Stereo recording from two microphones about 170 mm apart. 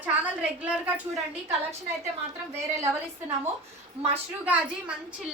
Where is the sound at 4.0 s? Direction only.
10° right (ahead or behind).